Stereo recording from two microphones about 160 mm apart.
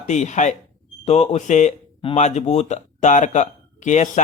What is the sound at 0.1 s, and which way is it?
Speech, 45° left (ahead or behind).